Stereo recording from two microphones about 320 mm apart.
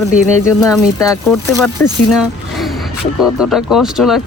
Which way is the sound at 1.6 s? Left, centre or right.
Centre.